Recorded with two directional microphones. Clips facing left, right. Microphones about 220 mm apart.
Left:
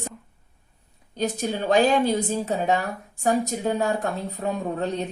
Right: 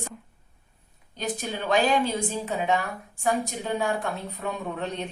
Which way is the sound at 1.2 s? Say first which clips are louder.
Left 5 dB; 40° left (ahead or behind).